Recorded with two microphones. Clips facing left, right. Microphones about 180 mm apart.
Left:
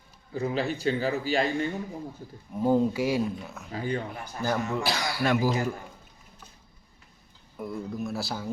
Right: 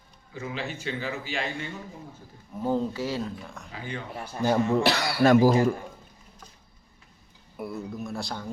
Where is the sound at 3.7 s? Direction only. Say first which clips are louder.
Left 7 dB; 40° left (ahead or behind).